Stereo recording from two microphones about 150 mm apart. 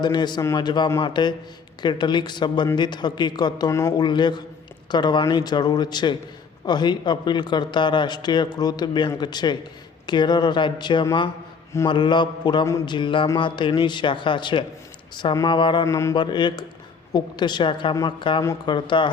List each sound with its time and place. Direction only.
0.0 s a man's voice: 30° left (ahead or behind)
15.9 s a man's voice: 20° left (ahead or behind)
16.1 s speech: 30° left (ahead or behind)